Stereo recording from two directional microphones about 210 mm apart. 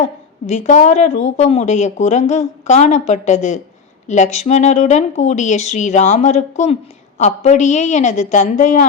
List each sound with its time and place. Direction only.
0.0 s a woman's voice: 35° left (ahead or behind)